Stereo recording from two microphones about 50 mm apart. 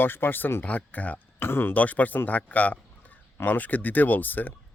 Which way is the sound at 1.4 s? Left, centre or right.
Left.